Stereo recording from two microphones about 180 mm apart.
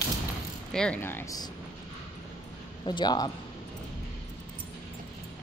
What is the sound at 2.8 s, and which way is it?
Speech, 25° left (ahead or behind).